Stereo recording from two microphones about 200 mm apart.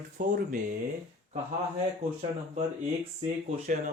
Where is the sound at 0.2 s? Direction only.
45° right (ahead or behind).